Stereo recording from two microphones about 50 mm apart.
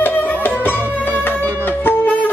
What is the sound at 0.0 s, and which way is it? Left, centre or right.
Music, left.